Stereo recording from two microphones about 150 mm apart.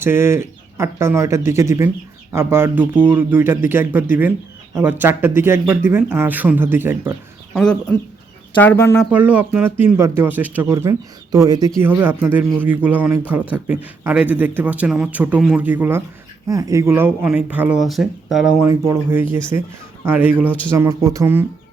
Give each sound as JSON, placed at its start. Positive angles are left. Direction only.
{"t": 0.0, "sound": "a man's voice", "side_deg": -15}
{"t": 7.5, "sound": "speech", "side_deg": 5}
{"t": 9.1, "sound": "a man's voice", "side_deg": -10}
{"t": 11.8, "sound": "a man's voice", "side_deg": -15}
{"t": 18.6, "sound": "a man's voice", "side_deg": -15}